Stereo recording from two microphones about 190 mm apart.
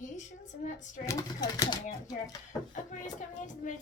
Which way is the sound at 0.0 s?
40° left (ahead or behind).